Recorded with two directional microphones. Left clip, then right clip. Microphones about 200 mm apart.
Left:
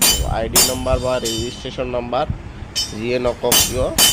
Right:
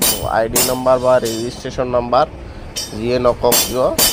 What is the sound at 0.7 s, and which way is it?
Speech, 10° right (ahead or behind).